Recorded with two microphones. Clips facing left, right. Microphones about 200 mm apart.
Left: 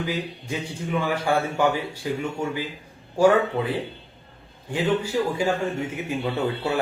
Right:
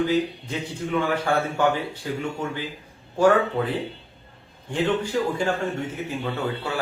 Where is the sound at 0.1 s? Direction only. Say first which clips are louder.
Right 5 dB; 10° left (ahead or behind).